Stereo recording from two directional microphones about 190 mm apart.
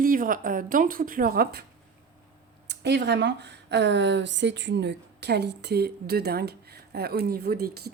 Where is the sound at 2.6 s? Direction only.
65° right (ahead or behind).